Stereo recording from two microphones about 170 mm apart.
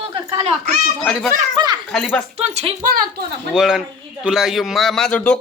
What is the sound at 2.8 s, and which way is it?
Speech, 60° right (ahead or behind).